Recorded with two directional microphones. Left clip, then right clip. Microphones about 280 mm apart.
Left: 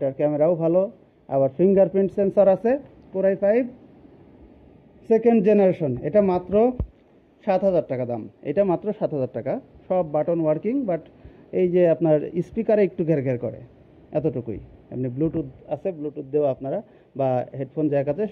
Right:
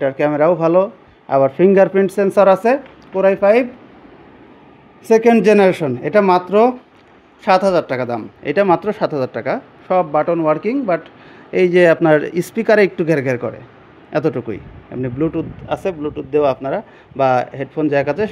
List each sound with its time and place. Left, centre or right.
0.0 s speech: centre
5.0 s speech: centre